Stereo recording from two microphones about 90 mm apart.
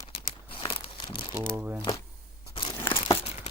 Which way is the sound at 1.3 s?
30° right (ahead or behind).